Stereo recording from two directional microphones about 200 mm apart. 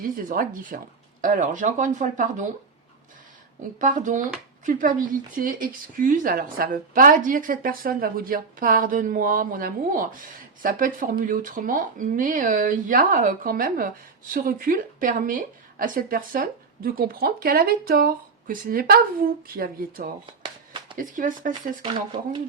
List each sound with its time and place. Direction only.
0.2 s speech: 45° right (ahead or behind)
3.8 s speech: 40° right (ahead or behind)
21.8 s speech: 25° right (ahead or behind)